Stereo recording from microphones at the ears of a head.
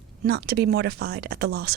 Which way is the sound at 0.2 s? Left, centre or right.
Right.